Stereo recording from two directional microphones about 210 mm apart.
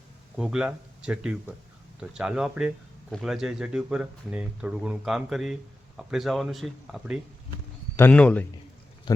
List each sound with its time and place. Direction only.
0.3 s a man's voice: 5° right (ahead or behind)
9.1 s speech: 20° left (ahead or behind)